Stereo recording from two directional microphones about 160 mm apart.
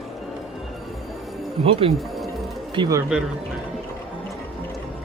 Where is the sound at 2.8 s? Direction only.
20° right (ahead or behind).